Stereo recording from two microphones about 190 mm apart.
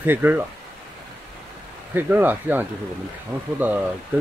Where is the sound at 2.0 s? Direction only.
10° right (ahead or behind).